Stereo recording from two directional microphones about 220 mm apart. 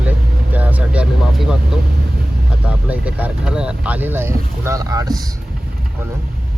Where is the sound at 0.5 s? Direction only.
5° right (ahead or behind).